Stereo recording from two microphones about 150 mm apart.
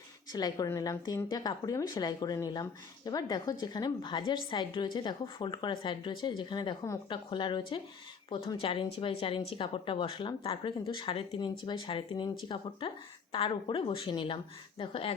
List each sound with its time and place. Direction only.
0.3 s a woman's voice: 25° left (ahead or behind)